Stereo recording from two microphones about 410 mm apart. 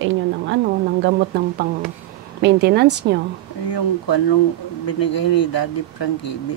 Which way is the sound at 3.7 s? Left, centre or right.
Left.